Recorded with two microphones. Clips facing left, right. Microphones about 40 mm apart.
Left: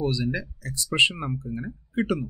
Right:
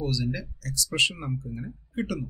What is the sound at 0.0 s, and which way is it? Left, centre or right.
Speech, left.